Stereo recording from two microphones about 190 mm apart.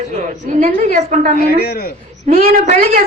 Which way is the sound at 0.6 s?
45° right (ahead or behind).